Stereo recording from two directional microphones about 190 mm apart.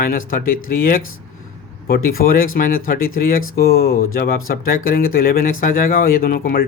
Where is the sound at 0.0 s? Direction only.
45° left (ahead or behind).